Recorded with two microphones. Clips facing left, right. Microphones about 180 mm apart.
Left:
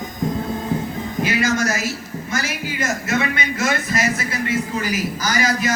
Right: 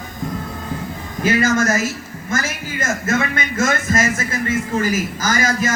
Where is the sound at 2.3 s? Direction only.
50° right (ahead or behind).